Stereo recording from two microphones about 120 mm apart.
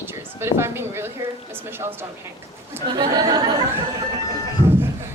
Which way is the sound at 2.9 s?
35° right (ahead or behind).